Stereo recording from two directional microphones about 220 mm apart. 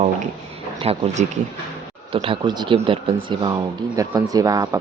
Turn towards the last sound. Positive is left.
turn(degrees=-15)  # may be behind; listen again after turning